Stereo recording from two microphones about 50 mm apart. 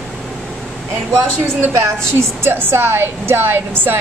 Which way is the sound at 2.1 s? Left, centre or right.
Right.